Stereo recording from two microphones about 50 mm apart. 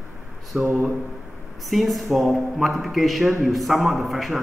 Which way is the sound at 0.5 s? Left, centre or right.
Centre.